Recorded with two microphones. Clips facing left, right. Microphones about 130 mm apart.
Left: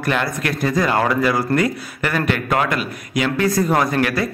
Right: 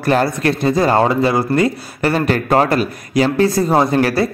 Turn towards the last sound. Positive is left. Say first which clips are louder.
# right 4 dB
turn(degrees=-30)  # may be behind; listen again after turning